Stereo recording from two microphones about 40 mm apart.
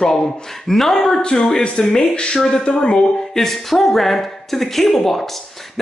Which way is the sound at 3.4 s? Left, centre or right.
Centre.